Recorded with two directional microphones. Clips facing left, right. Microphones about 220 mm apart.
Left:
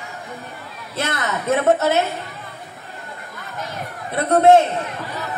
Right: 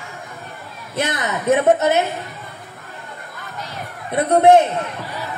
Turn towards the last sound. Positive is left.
turn(degrees=-15)  # may be behind; listen again after turning